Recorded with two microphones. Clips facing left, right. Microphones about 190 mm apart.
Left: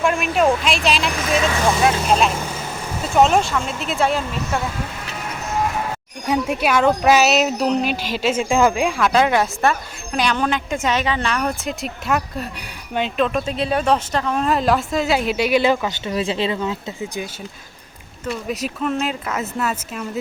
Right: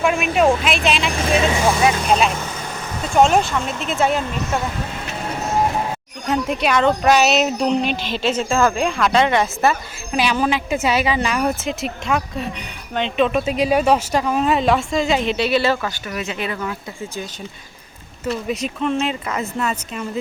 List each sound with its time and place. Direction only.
0.0 s speech: centre (ahead or behind)
6.2 s speech: 10° left (ahead or behind)
16.0 s speech: 30° left (ahead or behind)
18.4 s speech: centre (ahead or behind)